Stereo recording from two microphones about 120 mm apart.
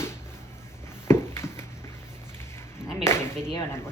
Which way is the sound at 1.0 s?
20° left (ahead or behind).